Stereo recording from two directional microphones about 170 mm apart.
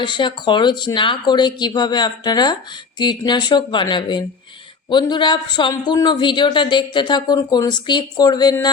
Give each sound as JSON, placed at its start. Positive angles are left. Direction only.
{"t": 0.0, "sound": "a man's voice", "side_deg": 30}